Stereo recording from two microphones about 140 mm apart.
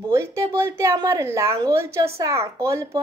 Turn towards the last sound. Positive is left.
turn(degrees=-20)  # may be behind; listen again after turning